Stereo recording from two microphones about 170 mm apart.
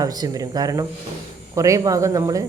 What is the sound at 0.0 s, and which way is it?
Speech, 20° right (ahead or behind).